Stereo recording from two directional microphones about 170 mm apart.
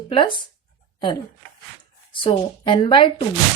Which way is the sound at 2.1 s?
30° left (ahead or behind).